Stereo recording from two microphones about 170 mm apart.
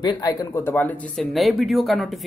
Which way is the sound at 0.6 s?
10° left (ahead or behind).